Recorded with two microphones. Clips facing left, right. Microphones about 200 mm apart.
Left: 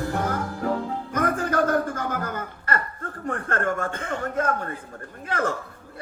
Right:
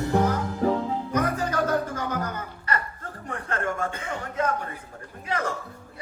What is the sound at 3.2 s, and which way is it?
A man's voice, 50° left (ahead or behind).